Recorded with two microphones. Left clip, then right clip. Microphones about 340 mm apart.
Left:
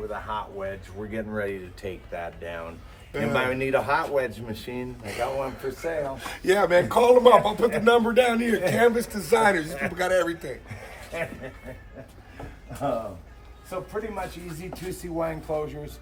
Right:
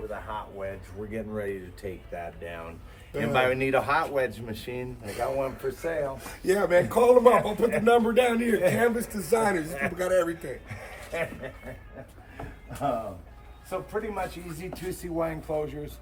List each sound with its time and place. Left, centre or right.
0.1 s a man's voice: left
1.5 s speech: centre
12.4 s a sound: centre
13.7 s speech: centre